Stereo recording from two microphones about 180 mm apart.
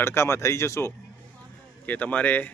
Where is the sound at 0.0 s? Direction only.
15° left (ahead or behind).